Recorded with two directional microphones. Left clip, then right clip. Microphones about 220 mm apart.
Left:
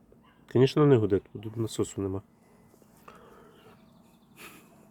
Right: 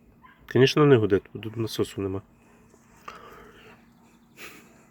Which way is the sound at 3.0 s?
10° right (ahead or behind).